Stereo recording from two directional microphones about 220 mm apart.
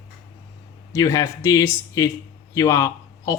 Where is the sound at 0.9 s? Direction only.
15° left (ahead or behind).